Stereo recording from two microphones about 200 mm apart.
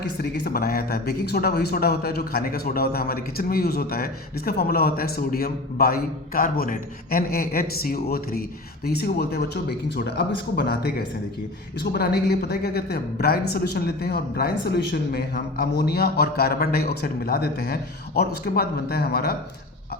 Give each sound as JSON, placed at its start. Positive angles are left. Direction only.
{"t": 0.0, "sound": "a man's voice", "side_deg": 55}